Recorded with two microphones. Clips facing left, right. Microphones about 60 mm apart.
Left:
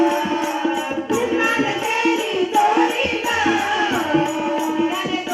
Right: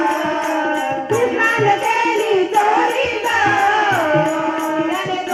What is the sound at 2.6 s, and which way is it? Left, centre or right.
Music, right.